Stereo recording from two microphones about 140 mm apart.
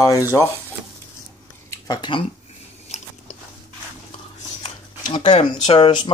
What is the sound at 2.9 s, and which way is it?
Biting, 50° left (ahead or behind).